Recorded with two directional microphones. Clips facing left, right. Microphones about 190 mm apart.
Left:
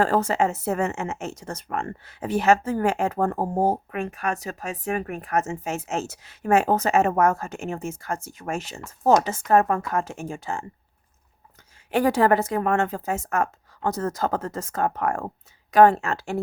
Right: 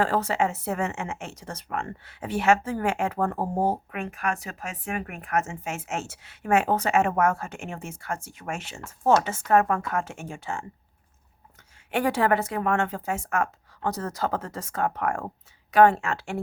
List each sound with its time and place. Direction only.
0.0 s speech: 45° left (ahead or behind)
11.9 s speech: 40° left (ahead or behind)